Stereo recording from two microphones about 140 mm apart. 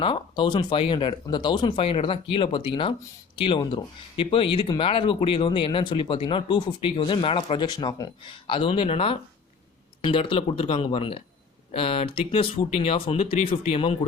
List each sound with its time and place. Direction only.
0.0 s speech: 35° left (ahead or behind)